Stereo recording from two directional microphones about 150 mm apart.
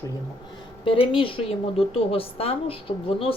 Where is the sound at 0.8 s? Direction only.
35° left (ahead or behind).